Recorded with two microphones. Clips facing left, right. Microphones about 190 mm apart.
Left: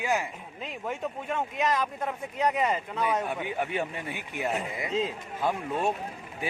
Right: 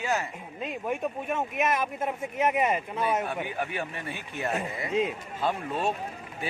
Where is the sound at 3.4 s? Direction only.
20° left (ahead or behind).